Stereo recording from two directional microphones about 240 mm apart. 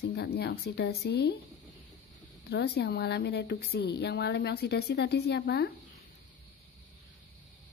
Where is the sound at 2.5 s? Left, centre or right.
Left.